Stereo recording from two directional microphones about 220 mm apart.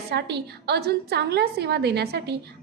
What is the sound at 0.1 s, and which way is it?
A woman's voice, 50° right (ahead or behind).